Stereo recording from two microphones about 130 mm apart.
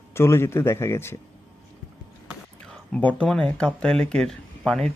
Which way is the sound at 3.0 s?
10° left (ahead or behind).